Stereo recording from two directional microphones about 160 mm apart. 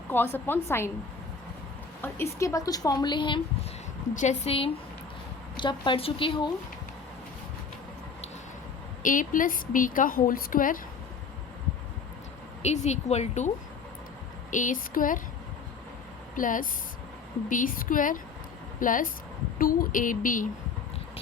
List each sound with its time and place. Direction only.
0.1 s a woman's voice: 15° left (ahead or behind)
2.0 s speech: 15° left (ahead or behind)
4.1 s speech: 50° left (ahead or behind); by 6.5 s 30° left (ahead or behind)
9.0 s a woman's voice: 55° left (ahead or behind)
12.6 s speech: 45° left (ahead or behind)
14.5 s a woman's voice: 55° left (ahead or behind)
16.3 s a woman's voice: 55° left (ahead or behind)